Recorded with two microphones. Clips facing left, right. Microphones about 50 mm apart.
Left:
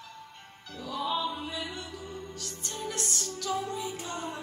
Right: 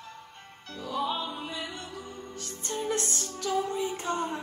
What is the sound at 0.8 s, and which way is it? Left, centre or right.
Music, right.